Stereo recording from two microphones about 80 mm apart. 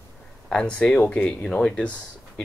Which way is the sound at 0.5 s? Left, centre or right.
Centre.